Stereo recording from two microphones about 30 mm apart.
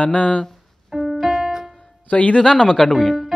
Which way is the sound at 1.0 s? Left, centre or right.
Centre.